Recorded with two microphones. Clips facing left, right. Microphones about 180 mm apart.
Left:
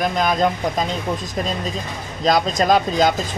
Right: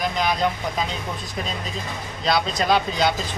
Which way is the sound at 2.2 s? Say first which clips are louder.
Left 4 dB; 45° left (ahead or behind).